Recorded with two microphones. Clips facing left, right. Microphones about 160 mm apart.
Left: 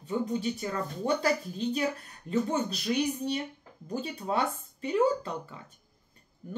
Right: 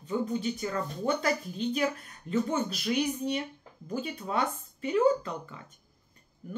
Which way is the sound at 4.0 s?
30° left (ahead or behind).